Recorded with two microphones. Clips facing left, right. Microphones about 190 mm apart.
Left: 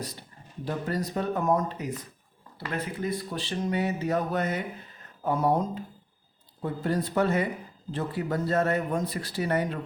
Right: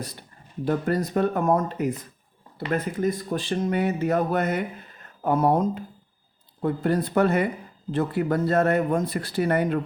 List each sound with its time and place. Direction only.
0.2 s speech: 55° right (ahead or behind)